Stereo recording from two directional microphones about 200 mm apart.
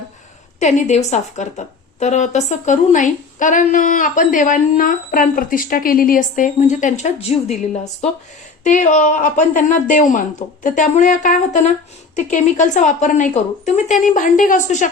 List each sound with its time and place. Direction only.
0.6 s a woman's voice: 35° left (ahead or behind)